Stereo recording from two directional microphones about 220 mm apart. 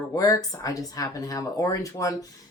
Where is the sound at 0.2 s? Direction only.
15° left (ahead or behind).